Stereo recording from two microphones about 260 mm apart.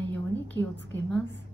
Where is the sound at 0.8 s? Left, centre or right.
Left.